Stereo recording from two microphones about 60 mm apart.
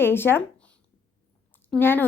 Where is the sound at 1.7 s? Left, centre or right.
Left.